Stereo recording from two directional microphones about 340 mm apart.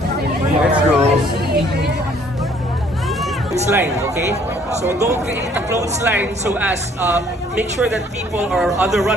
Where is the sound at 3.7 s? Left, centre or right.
Centre.